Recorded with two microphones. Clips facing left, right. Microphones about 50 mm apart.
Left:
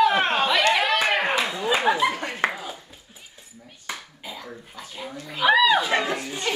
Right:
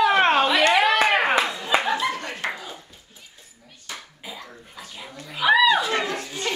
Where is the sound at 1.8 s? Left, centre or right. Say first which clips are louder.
Left 3 dB; centre.